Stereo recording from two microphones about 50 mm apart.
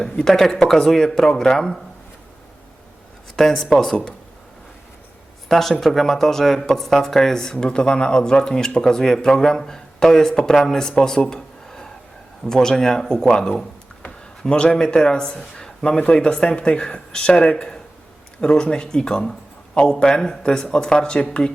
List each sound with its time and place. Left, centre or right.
0.0 s speech: centre
3.3 s speech: centre
5.5 s speech: centre